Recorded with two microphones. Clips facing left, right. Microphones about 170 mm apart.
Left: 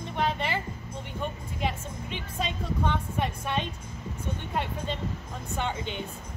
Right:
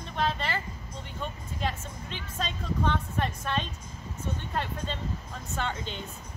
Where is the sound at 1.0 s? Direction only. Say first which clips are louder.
Left 3 dB; 15° left (ahead or behind).